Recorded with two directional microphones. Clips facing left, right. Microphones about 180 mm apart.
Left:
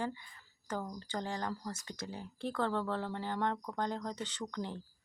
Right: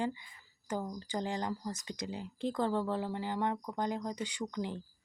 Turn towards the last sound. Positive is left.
turn(degrees=-15)  # may be behind; listen again after turning